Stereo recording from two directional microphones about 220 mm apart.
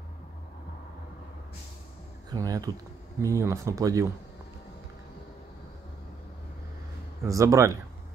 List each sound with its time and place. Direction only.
2.2 s speech: 15° right (ahead or behind)
7.2 s speech: 15° right (ahead or behind)